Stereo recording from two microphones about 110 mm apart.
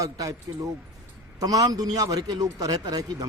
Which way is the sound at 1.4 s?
35° right (ahead or behind).